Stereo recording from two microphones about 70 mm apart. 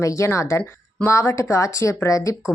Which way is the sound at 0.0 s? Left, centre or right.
Left.